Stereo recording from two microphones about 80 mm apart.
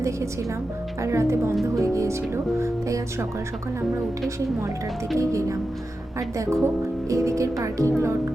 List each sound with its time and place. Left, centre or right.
1.0 s speech: right
5.1 s speech: right